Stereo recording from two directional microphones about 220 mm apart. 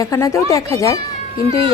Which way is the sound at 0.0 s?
15° left (ahead or behind).